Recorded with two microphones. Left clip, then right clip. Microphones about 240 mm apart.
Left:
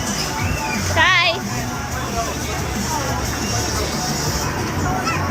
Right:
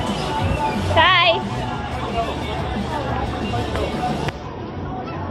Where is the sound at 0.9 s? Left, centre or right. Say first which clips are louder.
Right 1 dB; centre.